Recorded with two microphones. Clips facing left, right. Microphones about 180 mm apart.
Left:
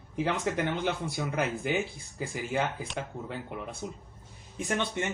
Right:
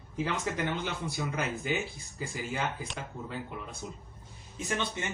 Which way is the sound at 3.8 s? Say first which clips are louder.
Left 3 dB; 65° left (ahead or behind).